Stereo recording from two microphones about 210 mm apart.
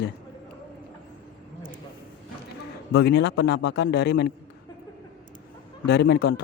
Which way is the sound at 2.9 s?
55° left (ahead or behind).